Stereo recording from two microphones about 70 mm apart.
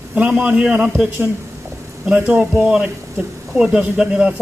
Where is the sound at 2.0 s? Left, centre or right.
Centre.